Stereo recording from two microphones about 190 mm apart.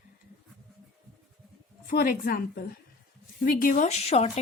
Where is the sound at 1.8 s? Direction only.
50° left (ahead or behind).